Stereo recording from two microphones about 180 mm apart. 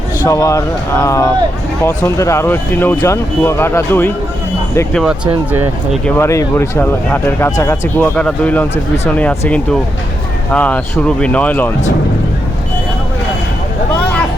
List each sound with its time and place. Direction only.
0.3 s speech: 15° left (ahead or behind)
4.9 s speech: 5° right (ahead or behind)
6.1 s speech: 15° left (ahead or behind)